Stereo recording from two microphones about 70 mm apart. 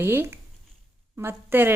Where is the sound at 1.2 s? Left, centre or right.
Right.